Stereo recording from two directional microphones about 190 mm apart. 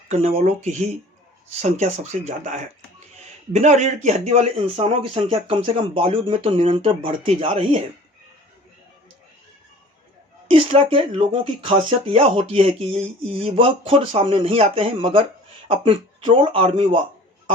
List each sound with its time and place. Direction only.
0.1 s speech: 35° right (ahead or behind)
10.5 s speech: 30° right (ahead or behind)